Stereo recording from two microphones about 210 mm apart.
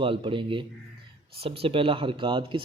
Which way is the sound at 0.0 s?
25° right (ahead or behind).